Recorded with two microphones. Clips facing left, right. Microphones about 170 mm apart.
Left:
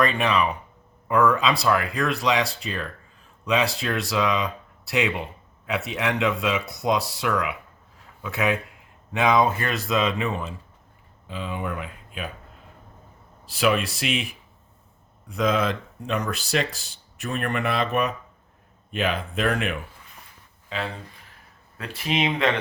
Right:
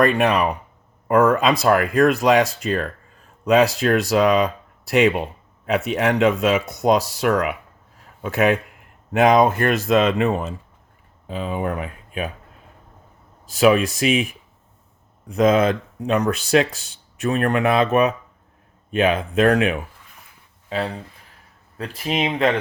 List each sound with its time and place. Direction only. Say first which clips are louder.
0.0 s speech: right 5 dB; 50° right (ahead or behind)
13.4 s speech: right 7 dB; 45° right (ahead or behind)
19.1 s speech: right 8 dB; 45° right (ahead or behind)